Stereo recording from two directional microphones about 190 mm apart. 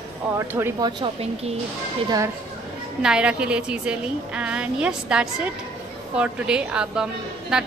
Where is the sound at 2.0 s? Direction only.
15° right (ahead or behind).